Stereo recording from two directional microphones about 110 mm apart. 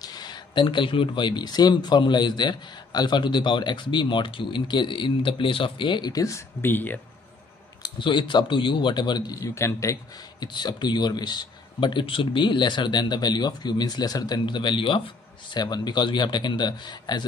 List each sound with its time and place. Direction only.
0.0 s speech: 40° left (ahead or behind)
6.6 s speech: 15° left (ahead or behind)
7.8 s speech: 45° left (ahead or behind)
9.4 s a man's voice: 25° left (ahead or behind)
10.4 s speech: 40° left (ahead or behind)
15.5 s speech: 40° left (ahead or behind)